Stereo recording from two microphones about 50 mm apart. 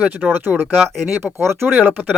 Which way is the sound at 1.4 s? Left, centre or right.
Right.